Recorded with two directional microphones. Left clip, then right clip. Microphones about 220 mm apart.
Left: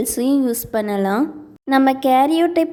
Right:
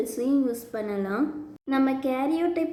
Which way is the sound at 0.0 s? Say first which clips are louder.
Left 7 dB; 45° left (ahead or behind).